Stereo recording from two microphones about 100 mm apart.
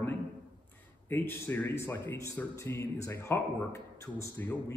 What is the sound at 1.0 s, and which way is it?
Speech, 25° left (ahead or behind).